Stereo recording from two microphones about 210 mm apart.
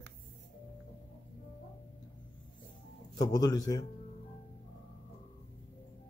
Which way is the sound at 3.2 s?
20° left (ahead or behind).